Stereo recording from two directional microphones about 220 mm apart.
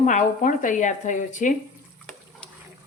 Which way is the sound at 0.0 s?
35° left (ahead or behind).